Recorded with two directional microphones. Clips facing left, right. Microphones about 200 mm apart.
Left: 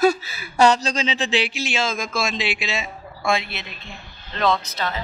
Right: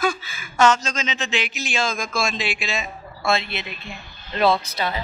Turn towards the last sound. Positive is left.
turn(degrees=-10)  # may be behind; listen again after turning